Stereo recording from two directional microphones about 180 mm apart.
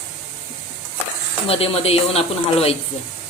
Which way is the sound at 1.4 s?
35° left (ahead or behind).